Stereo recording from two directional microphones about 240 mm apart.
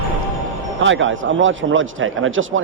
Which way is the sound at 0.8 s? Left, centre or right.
Right.